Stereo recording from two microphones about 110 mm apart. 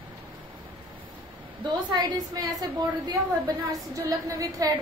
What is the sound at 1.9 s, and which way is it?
A woman's voice, 40° right (ahead or behind).